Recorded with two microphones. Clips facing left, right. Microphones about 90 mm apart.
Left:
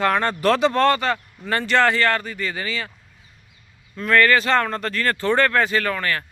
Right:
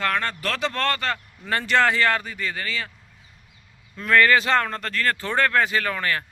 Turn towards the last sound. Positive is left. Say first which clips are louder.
# left 2 dB
turn(degrees=-15)  # may be behind; listen again after turning